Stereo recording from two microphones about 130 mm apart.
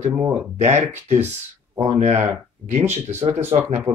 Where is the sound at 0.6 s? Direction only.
60° right (ahead or behind).